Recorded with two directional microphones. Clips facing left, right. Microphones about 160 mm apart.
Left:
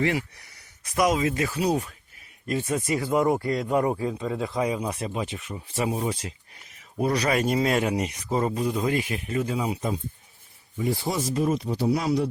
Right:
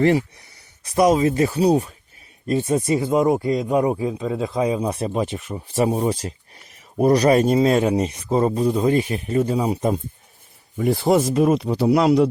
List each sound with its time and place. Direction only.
0.1 s speech: 25° right (ahead or behind); by 10.0 s 50° right (ahead or behind)
10.8 s speech: 60° right (ahead or behind)